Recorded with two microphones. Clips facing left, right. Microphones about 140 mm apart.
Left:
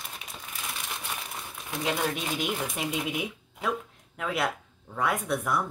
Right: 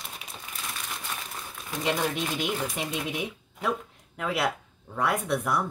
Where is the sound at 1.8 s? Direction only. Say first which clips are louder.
Right 2 dB; 5° left (ahead or behind).